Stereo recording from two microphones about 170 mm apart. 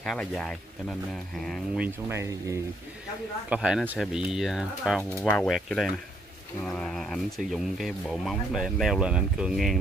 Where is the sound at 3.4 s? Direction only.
5° right (ahead or behind).